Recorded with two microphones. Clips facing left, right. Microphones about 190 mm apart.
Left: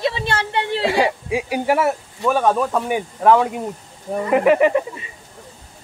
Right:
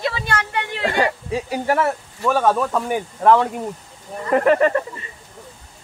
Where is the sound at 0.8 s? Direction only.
10° left (ahead or behind).